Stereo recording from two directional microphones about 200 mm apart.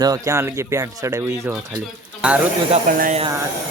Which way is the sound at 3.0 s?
40° right (ahead or behind).